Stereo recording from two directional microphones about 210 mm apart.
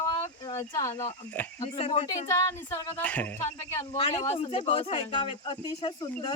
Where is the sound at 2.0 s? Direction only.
15° left (ahead or behind).